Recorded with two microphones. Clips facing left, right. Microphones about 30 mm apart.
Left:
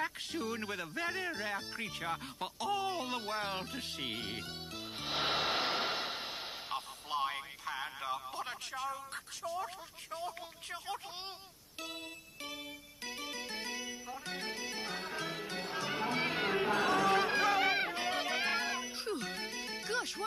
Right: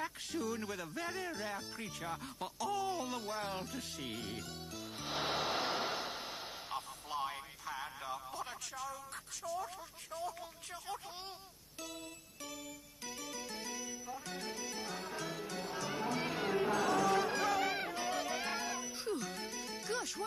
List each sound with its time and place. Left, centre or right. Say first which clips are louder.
0.0 s speech: left 2 dB; left
9.4 s speech: left 1 dB; centre
10.1 s speech: left 1 dB; left
13.0 s music: left 3 dB; left